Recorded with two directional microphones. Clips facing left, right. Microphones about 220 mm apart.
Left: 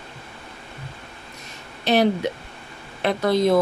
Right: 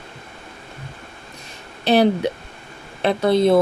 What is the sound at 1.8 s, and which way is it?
Speech, 35° right (ahead or behind).